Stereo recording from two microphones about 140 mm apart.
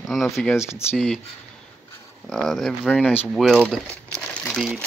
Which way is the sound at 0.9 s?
5° left (ahead or behind).